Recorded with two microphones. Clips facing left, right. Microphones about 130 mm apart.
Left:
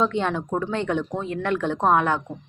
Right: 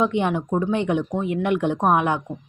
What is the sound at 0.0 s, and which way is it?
Speech, 15° right (ahead or behind).